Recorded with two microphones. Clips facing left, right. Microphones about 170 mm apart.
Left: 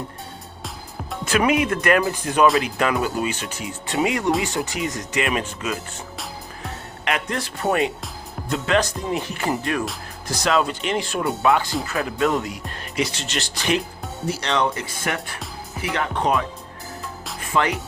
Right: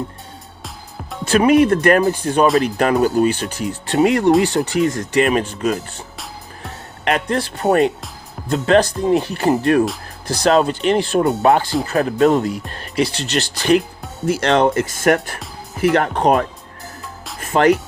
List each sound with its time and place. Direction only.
1.2 s speech: 30° right (ahead or behind)
4.5 s speech: 65° right (ahead or behind)
5.1 s speech: 35° right (ahead or behind)
7.0 s speech: 35° right (ahead or behind)
14.3 s speech: 50° right (ahead or behind)
17.4 s music: 45° right (ahead or behind)